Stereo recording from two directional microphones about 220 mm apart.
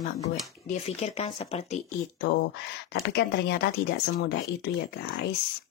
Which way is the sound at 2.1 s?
50° left (ahead or behind).